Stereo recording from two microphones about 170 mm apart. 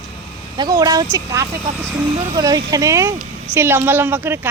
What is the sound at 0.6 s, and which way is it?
Speech, 25° right (ahead or behind).